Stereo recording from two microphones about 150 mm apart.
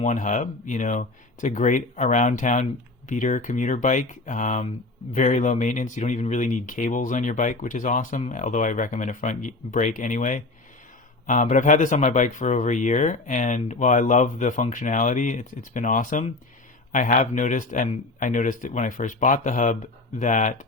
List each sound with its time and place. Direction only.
0.0 s speech: 55° left (ahead or behind)